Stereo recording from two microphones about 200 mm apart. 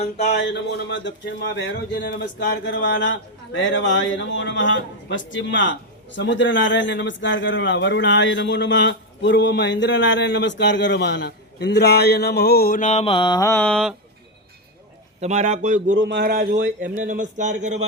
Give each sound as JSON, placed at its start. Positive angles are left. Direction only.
{"t": 0.2, "sound": "speech", "side_deg": 55}
{"t": 15.2, "sound": "speech", "side_deg": -35}
{"t": 16.0, "sound": "speech", "side_deg": -60}